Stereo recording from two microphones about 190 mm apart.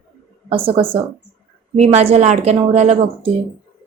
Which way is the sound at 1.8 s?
35° right (ahead or behind).